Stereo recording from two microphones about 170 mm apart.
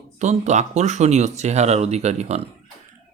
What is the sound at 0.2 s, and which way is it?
Speech, 45° right (ahead or behind).